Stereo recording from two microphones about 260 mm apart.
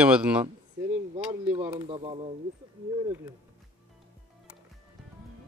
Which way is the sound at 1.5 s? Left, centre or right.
Centre.